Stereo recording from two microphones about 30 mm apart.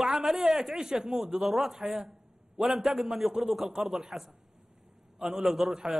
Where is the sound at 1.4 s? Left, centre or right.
Centre.